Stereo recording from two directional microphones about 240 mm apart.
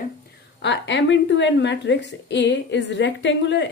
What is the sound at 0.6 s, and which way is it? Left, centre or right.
A woman's voice, left.